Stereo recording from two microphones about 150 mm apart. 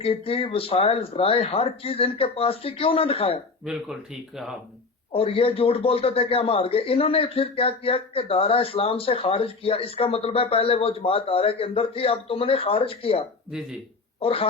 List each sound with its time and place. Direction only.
0.0 s a man's voice: 40° left (ahead or behind)
3.6 s speech: centre (ahead or behind)
5.1 s a man's voice: 40° left (ahead or behind)
13.5 s speech: 5° right (ahead or behind)
14.2 s speech: 40° left (ahead or behind)